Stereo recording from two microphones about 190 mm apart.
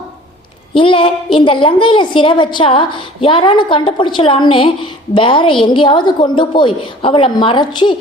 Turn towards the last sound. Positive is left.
turn(degrees=25)  # may be behind; listen again after turning